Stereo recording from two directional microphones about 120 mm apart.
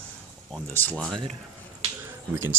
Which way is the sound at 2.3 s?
20° right (ahead or behind).